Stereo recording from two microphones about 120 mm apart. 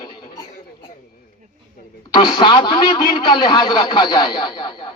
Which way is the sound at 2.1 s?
40° left (ahead or behind).